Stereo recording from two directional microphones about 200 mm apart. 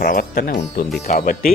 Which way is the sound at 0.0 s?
45° left (ahead or behind).